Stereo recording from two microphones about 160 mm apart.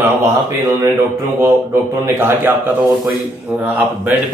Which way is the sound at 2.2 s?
15° right (ahead or behind).